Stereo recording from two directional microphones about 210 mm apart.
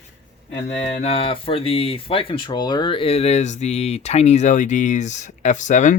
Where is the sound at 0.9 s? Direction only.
25° left (ahead or behind).